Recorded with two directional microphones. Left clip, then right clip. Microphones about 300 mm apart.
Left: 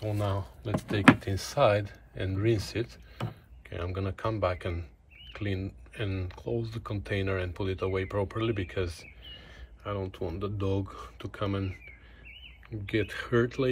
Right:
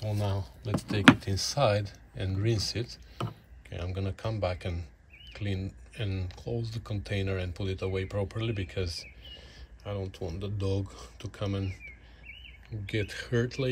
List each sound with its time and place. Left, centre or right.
0.0 s speech: centre